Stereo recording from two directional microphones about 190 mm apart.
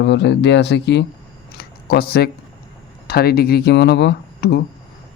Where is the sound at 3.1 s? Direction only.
55° left (ahead or behind).